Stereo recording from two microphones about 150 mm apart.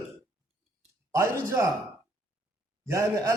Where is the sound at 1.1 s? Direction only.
20° right (ahead or behind).